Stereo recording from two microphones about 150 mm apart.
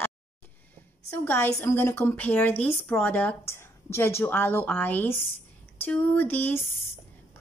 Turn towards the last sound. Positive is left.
turn(degrees=15)  # may be behind; listen again after turning